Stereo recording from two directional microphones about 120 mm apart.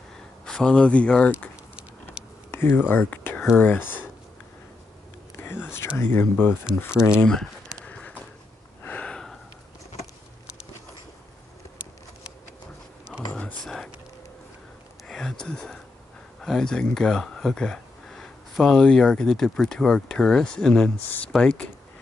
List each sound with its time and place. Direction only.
0.5 s speech: 5° left (ahead or behind)
2.5 s a sound: 20° left (ahead or behind)
2.9 s whispering: 15° left (ahead or behind)
3.5 s speech: 15° left (ahead or behind)
5.4 s a sound: 20° left (ahead or behind)
5.9 s speech: 15° left (ahead or behind)
6.9 s speech: 5° right (ahead or behind)
7.2 s speech: 5° left (ahead or behind)
7.8 s clip-clop: 10° left (ahead or behind)
8.8 s gasp: 10° left (ahead or behind)
13.3 s a sound: 10° left (ahead or behind)
15.0 s a sound: 5° left (ahead or behind)
16.3 s speech: 5° left (ahead or behind)